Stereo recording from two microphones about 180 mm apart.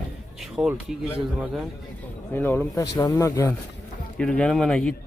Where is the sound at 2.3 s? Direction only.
10° left (ahead or behind).